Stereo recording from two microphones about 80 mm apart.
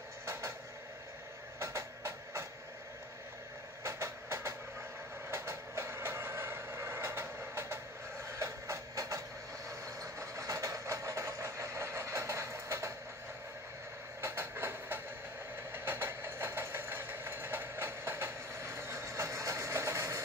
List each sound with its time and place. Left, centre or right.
0.2 s a sound: right
1.6 s a sound: right
3.8 s train: right
8.3 s vehicle: right
14.2 s train: right
15.7 s vehicle: right